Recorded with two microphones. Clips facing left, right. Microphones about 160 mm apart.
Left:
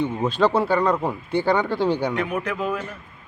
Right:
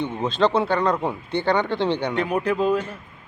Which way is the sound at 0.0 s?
5° left (ahead or behind).